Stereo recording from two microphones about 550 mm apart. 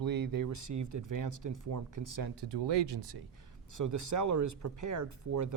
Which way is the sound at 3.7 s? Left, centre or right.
Right.